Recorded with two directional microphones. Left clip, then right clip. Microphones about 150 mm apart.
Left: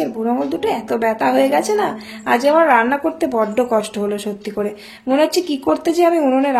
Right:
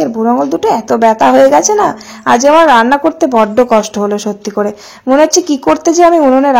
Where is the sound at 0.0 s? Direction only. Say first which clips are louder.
Right 8 dB; 30° right (ahead or behind).